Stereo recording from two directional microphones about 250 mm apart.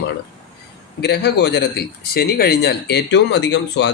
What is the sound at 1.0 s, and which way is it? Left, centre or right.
Speech, left.